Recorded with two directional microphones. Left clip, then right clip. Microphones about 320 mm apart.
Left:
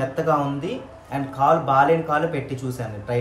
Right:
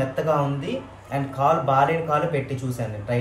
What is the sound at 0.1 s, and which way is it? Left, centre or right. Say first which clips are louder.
Speech: left 1 dB; centre.